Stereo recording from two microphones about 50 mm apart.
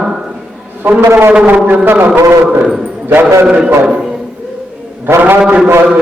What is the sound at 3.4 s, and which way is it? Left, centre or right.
Speech, right.